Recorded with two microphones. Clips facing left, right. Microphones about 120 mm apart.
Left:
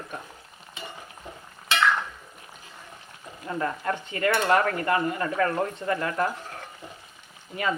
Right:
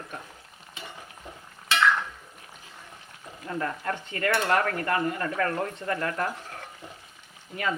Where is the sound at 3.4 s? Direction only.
15° left (ahead or behind).